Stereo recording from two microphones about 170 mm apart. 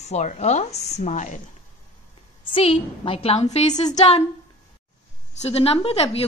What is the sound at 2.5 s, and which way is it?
Speech, 35° left (ahead or behind).